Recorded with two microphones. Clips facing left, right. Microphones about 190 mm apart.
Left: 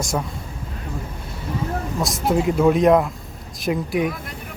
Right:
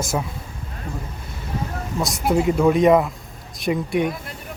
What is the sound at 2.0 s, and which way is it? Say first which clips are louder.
A woman's voice: right 1 dB; centre (ahead or behind).